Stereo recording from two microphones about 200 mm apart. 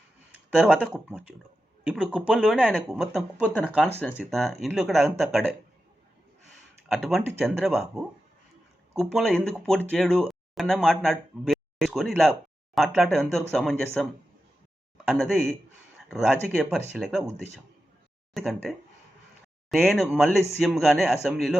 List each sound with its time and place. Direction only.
0.5 s speech: 5° right (ahead or behind)
6.8 s speech: centre (ahead or behind)
18.3 s speech: centre (ahead or behind)